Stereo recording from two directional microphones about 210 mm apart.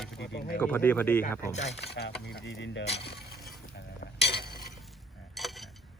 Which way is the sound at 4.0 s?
50° left (ahead or behind).